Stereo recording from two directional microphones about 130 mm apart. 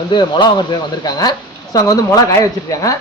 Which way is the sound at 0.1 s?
35° left (ahead or behind).